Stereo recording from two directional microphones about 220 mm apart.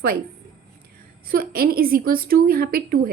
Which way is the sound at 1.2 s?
40° right (ahead or behind).